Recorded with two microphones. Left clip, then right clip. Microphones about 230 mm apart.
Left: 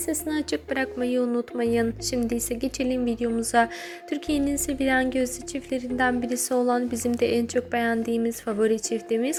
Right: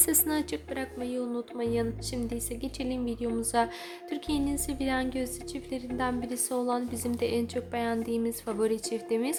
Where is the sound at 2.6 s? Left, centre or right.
Centre.